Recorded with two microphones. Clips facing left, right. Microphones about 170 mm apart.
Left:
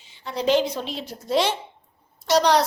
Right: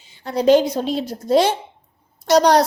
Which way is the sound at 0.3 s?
45° right (ahead or behind).